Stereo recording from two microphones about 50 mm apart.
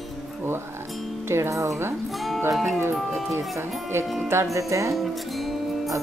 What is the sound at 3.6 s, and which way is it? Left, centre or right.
Speech, right.